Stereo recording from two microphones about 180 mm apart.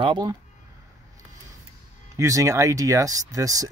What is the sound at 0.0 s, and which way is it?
Speech, 25° right (ahead or behind).